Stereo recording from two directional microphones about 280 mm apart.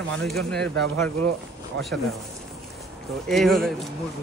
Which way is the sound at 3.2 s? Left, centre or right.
Centre.